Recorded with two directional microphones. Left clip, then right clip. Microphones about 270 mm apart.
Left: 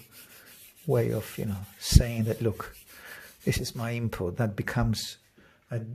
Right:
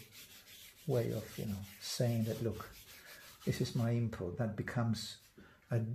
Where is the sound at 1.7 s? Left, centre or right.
Left.